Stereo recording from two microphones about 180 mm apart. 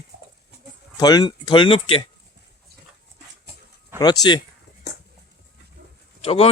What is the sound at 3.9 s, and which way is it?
Speech, 20° left (ahead or behind).